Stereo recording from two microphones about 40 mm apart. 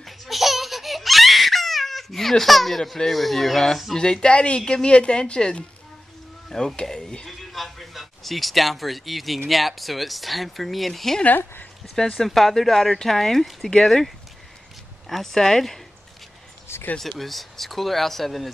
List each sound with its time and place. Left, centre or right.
0.0 s laughter: centre
3.1 s speech: centre
3.9 s speech: centre
7.2 s speech: centre
16.7 s a sound: left
17.0 s speech: centre